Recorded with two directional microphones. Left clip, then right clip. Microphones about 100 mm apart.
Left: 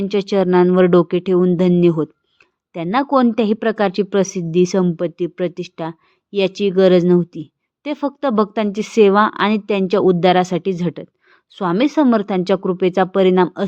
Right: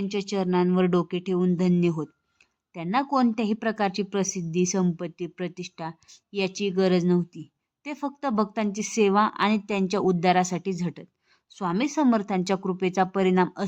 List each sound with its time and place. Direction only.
0.0 s a woman's voice: 40° left (ahead or behind)